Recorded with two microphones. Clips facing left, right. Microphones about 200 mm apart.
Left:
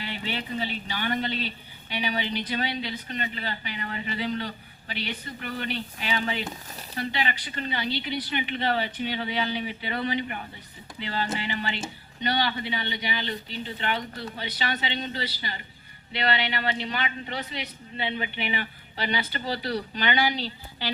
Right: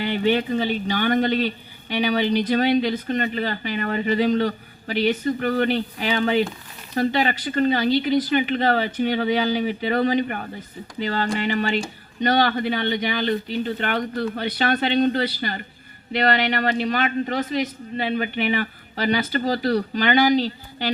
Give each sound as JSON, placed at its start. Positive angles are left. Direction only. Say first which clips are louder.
{"t": 0.1, "sound": "speech", "louder": "right 13 dB", "side_deg": -55}
{"t": 1.1, "sound": "a man's voice", "louder": "right 9 dB", "side_deg": -45}
{"t": 2.5, "sound": "a man's voice", "louder": "right 11 dB", "side_deg": -45}